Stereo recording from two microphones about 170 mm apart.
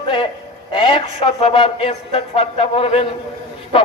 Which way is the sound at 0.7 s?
30° left (ahead or behind).